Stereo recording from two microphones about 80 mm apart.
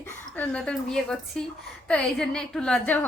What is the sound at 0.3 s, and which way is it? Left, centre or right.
A woman's voice, centre.